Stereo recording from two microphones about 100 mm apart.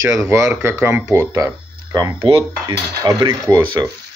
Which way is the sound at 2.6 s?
40° right (ahead or behind).